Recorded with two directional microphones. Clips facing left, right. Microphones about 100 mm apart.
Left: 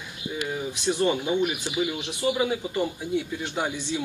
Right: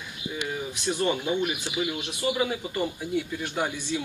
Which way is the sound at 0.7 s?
20° left (ahead or behind).